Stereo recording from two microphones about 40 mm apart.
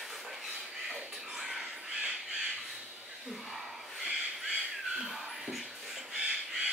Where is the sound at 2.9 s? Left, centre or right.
Centre.